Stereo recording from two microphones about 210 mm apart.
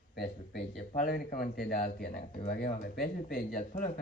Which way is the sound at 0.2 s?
50° left (ahead or behind).